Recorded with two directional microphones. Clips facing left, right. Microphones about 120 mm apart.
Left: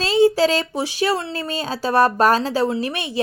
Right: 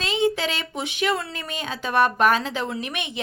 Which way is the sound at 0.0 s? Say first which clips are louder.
Left 8 dB; 35° left (ahead or behind).